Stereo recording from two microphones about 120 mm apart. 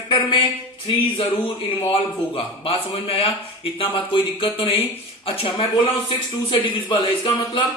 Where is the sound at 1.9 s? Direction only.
50° left (ahead or behind).